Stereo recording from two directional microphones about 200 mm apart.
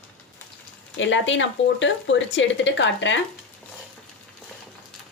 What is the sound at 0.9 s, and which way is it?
Speech, 65° left (ahead or behind).